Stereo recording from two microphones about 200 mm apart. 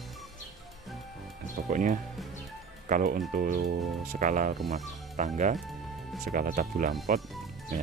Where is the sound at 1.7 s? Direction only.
40° right (ahead or behind).